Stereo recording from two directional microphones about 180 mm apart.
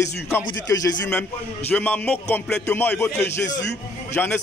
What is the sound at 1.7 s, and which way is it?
A man's voice, 10° left (ahead or behind).